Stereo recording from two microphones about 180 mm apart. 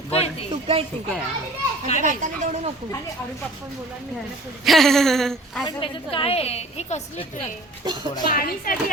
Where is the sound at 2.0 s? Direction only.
45° right (ahead or behind).